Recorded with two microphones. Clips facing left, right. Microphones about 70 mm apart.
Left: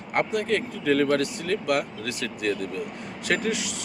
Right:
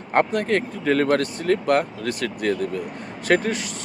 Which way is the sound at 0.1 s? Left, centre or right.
Right.